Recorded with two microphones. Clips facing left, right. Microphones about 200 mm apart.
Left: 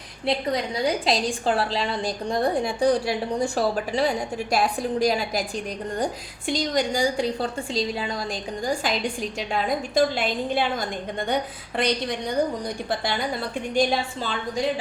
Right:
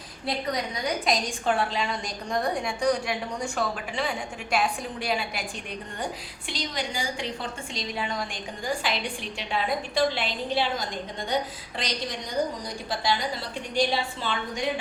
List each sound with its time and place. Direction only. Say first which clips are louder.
0.3 s a woman's voice: left 5 dB; 30° left (ahead or behind)
6.5 s a woman's voice: left 9 dB; 45° left (ahead or behind)
13.7 s a woman's voice: left 3 dB; 45° left (ahead or behind)